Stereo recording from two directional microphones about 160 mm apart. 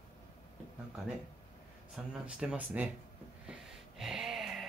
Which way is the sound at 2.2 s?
10° right (ahead or behind).